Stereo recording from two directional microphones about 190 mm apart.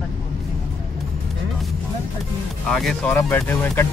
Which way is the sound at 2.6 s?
5° left (ahead or behind).